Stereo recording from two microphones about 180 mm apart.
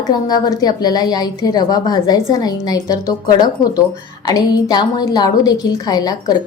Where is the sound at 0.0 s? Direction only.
20° left (ahead or behind).